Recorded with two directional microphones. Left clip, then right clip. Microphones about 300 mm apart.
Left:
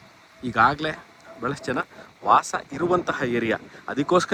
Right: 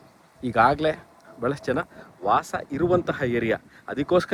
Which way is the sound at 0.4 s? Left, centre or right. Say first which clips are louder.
Right 1 dB; centre.